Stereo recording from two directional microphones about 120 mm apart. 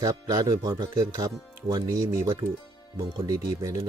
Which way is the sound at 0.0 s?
30° right (ahead or behind).